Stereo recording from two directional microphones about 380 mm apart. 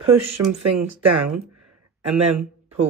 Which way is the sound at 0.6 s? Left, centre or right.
Right.